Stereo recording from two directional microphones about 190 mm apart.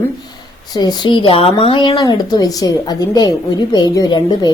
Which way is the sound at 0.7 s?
20° left (ahead or behind).